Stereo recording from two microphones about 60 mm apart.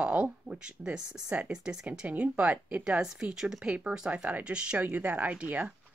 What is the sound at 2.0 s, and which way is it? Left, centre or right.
Speech, right.